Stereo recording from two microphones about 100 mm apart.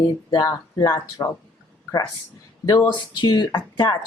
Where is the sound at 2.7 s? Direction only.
50° left (ahead or behind).